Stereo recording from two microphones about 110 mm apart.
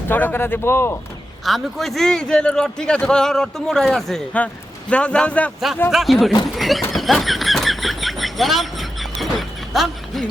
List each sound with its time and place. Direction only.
0.1 s speech: 15° left (ahead or behind)
1.5 s a man's voice: centre (ahead or behind)
5.9 s a man's voice: centre (ahead or behind)
6.9 s a sound: centre (ahead or behind)